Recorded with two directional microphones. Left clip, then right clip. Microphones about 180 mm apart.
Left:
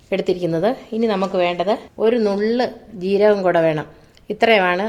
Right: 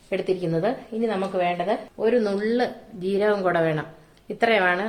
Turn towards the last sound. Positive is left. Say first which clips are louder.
# left 5 dB
turn(degrees=30)  # may be behind; listen again after turning